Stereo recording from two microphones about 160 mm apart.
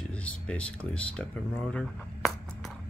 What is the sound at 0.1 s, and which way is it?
Speech, 5° left (ahead or behind).